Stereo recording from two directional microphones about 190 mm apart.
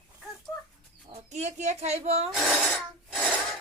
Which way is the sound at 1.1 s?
35° right (ahead or behind).